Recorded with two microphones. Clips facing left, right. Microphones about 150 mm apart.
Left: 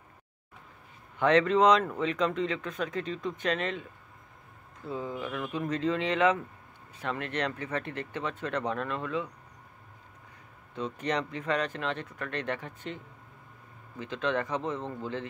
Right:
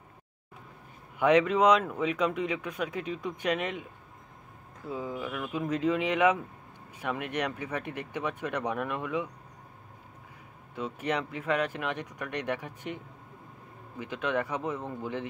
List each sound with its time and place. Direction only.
1.2 s speech: 10° right (ahead or behind)
4.8 s speech: 5° right (ahead or behind)
10.8 s speech: 5° right (ahead or behind)